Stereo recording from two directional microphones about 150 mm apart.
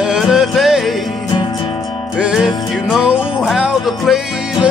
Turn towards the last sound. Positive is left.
turn(degrees=-5)  # may be behind; listen again after turning